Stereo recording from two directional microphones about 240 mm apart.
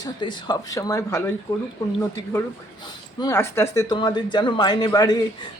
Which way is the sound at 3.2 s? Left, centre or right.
Centre.